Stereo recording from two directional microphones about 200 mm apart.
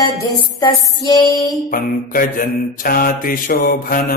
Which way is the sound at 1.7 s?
45° left (ahead or behind).